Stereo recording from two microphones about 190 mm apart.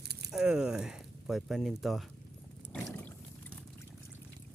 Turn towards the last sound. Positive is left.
turn(degrees=5)  # may be behind; listen again after turning